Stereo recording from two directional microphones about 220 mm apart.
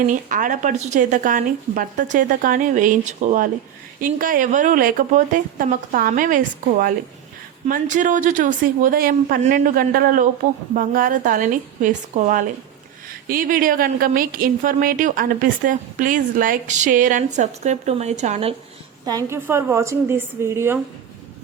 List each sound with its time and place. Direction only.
0.1 s speech: 35° right (ahead or behind)
19.0 s a woman's voice: 15° right (ahead or behind)